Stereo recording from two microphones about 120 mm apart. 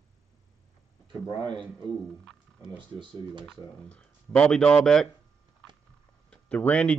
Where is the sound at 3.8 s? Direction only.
10° left (ahead or behind).